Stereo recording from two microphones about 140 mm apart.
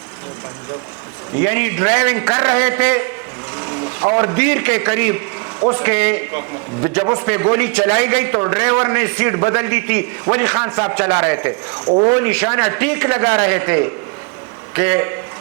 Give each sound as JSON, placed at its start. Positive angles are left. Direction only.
{"t": 1.4, "sound": "a man's voice", "side_deg": -15}
{"t": 3.6, "sound": "a man's voice", "side_deg": -25}